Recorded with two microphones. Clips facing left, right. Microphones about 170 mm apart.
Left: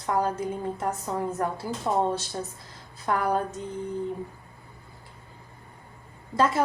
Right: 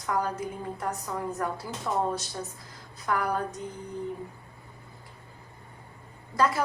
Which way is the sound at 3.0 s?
25° left (ahead or behind).